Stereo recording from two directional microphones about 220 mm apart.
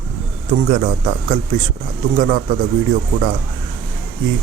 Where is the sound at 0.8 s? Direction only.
40° right (ahead or behind).